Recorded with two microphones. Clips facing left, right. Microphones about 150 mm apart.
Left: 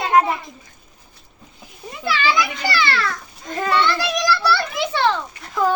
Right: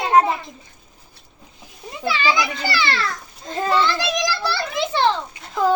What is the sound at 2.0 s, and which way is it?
A child's voice, 25° right (ahead or behind).